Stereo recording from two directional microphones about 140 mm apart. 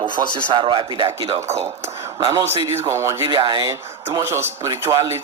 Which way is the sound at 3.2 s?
35° right (ahead or behind).